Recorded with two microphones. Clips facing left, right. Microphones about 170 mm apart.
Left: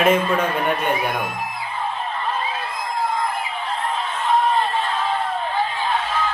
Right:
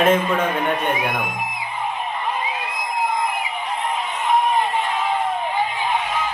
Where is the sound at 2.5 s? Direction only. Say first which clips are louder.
Even; 15° right (ahead or behind).